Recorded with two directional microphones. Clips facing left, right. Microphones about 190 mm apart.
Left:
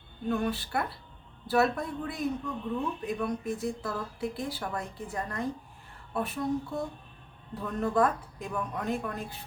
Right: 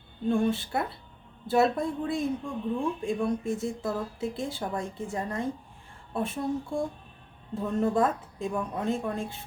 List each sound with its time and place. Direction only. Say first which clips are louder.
0.3 s speech: right 4 dB; 25° right (ahead or behind)